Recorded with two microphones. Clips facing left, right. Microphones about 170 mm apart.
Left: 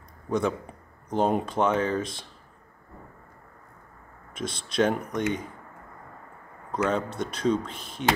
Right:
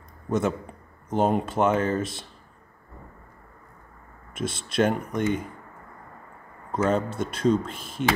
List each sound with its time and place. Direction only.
0.3 s speech: 5° right (ahead or behind)
4.4 s speech: 5° right (ahead or behind)
6.7 s speech: 5° right (ahead or behind)